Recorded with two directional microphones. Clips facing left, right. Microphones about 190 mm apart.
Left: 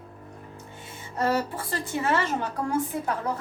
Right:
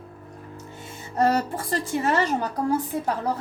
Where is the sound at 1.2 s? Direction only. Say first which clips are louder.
Right 4 dB; 40° right (ahead or behind).